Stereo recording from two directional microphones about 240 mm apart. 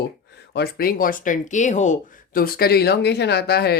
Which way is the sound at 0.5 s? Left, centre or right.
Left.